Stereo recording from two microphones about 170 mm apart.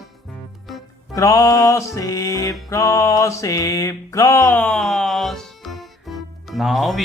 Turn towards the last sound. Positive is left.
turn(degrees=0)  # may be behind; listen again after turning